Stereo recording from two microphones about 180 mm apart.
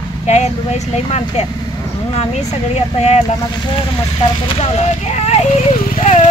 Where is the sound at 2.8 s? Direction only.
40° left (ahead or behind).